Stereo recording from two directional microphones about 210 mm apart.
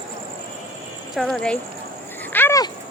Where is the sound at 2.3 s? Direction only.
15° left (ahead or behind).